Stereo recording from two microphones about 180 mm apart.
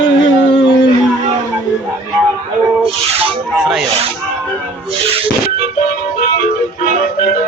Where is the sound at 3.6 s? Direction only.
Centre (ahead or behind).